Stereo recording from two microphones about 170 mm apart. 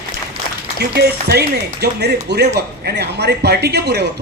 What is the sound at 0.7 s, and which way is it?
A man's voice, 70° right (ahead or behind).